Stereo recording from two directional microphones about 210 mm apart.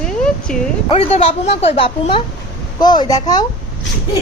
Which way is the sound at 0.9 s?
30° left (ahead or behind).